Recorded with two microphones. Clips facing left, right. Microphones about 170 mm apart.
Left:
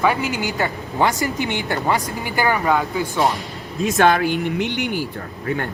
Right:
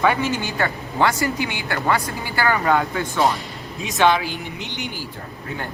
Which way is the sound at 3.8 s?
50° left (ahead or behind).